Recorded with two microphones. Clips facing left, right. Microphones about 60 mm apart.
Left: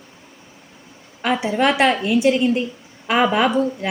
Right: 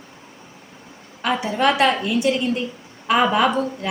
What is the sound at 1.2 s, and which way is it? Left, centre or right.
A woman's voice, centre.